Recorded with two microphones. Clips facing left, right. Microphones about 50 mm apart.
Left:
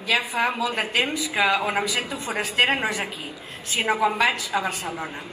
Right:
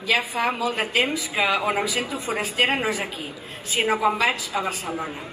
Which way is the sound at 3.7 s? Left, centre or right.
Right.